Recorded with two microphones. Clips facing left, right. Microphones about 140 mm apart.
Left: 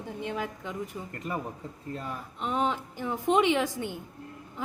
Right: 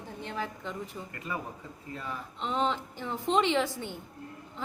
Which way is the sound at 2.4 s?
10° left (ahead or behind).